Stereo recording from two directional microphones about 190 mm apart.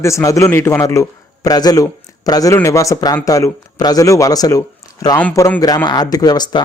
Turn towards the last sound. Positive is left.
turn(degrees=20)  # may be behind; listen again after turning